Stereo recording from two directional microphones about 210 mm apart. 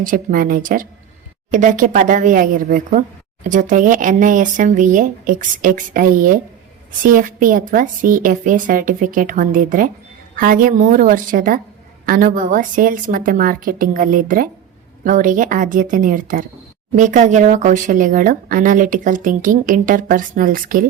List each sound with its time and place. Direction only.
0.0 s speech: 40° right (ahead or behind)